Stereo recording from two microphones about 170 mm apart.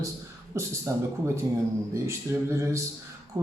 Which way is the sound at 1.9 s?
15° right (ahead or behind).